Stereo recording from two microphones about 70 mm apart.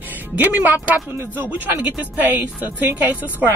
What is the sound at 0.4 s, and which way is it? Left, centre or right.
Speech, right.